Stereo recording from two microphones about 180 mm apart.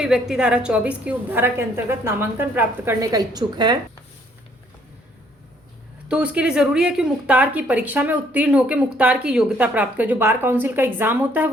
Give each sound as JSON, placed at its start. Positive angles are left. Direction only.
{"t": 0.0, "sound": "a woman's voice", "side_deg": -5}
{"t": 6.1, "sound": "a woman's voice", "side_deg": -5}